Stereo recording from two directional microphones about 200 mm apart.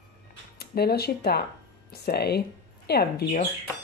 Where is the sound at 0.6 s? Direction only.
50° left (ahead or behind).